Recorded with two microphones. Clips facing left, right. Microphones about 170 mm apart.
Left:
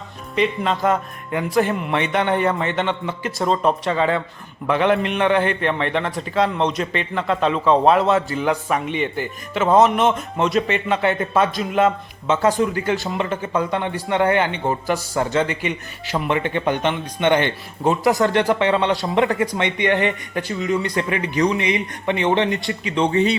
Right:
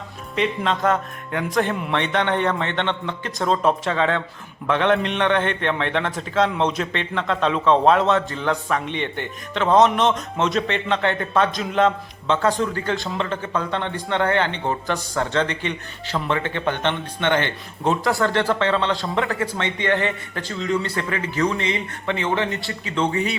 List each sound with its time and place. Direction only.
0.3 s a man's voice: centre (ahead or behind); by 23.4 s 25° left (ahead or behind)